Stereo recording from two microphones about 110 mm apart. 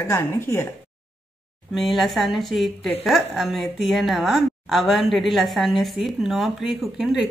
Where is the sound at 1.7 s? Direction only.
Centre (ahead or behind).